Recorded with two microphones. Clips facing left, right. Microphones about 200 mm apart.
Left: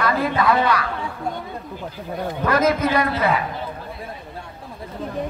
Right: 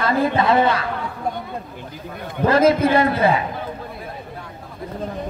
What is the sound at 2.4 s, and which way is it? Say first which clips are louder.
Speech: right 4 dB; 30° right (ahead or behind).